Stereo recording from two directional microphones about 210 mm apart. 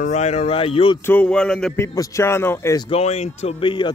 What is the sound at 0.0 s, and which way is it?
Speech, 35° left (ahead or behind).